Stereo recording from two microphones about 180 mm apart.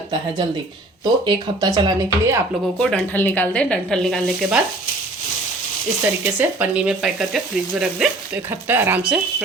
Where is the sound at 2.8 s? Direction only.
5° left (ahead or behind).